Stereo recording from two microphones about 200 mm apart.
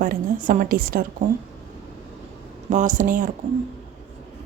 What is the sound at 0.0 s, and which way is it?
A woman's voice, 45° right (ahead or behind).